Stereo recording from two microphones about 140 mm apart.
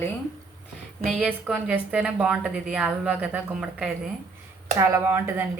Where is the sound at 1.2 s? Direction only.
10° right (ahead or behind).